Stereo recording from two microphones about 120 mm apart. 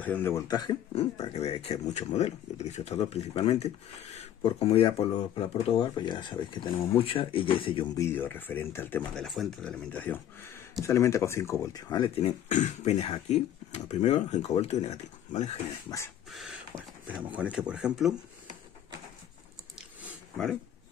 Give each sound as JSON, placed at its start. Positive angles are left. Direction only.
{"t": 0.0, "sound": "speech", "side_deg": 15}
{"t": 0.5, "sound": "speech", "side_deg": 35}
{"t": 0.9, "sound": "speech", "side_deg": 60}
{"t": 4.5, "sound": "speech", "side_deg": 50}
{"t": 7.9, "sound": "speech", "side_deg": 20}
{"t": 9.1, "sound": "speech", "side_deg": 0}
{"t": 12.2, "sound": "speech", "side_deg": 75}
{"t": 15.9, "sound": "speech", "side_deg": 25}
{"t": 16.3, "sound": "speech", "side_deg": 0}